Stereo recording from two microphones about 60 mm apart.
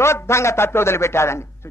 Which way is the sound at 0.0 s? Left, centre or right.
Left.